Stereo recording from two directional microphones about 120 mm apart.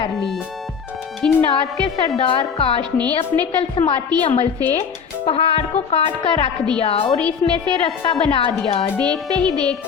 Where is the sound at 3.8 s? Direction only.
50° left (ahead or behind).